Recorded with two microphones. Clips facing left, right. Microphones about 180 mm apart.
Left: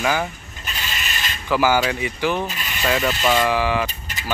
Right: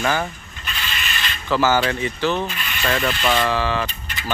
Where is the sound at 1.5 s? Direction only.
10° left (ahead or behind).